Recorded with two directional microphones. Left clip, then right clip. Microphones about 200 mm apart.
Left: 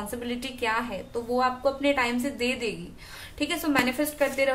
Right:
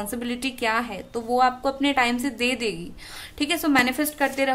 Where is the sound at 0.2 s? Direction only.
55° right (ahead or behind).